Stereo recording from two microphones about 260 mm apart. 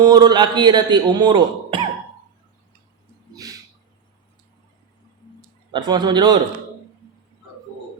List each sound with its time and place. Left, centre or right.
0.0 s speech: centre
3.3 s a sound: centre
5.7 s speech: centre